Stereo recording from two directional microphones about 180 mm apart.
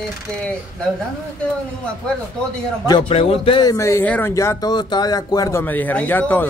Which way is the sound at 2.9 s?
30° left (ahead or behind).